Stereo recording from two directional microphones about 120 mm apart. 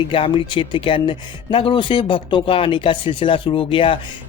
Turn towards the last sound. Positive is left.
turn(degrees=45)  # may be behind; listen again after turning